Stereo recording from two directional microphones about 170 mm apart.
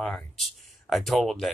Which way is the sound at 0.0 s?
Centre (ahead or behind).